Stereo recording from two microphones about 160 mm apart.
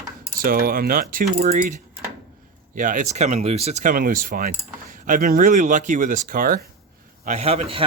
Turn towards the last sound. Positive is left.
turn(degrees=-35)  # may be behind; listen again after turning